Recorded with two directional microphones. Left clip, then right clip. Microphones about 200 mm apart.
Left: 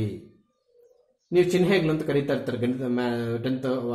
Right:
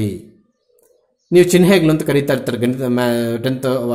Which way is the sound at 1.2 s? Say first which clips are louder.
Right 10 dB; 50° right (ahead or behind).